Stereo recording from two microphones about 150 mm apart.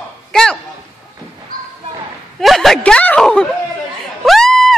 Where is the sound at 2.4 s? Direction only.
Centre (ahead or behind).